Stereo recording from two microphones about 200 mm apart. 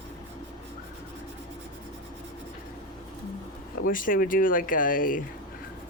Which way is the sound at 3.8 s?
45° left (ahead or behind).